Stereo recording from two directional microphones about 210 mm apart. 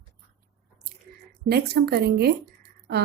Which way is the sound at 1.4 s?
50° right (ahead or behind).